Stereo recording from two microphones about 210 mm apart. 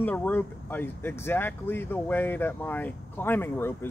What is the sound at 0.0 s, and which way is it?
Speech, 10° left (ahead or behind).